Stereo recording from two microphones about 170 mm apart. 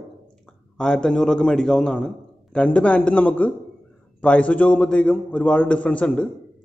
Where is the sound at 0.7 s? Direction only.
5° left (ahead or behind).